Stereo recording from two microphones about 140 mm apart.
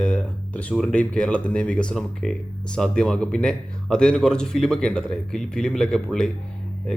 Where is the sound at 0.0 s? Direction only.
10° left (ahead or behind).